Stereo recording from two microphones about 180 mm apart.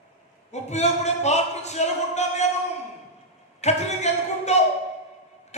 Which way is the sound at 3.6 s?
40° left (ahead or behind).